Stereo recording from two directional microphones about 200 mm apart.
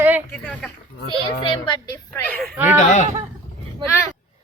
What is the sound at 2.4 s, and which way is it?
Speech, 5° right (ahead or behind).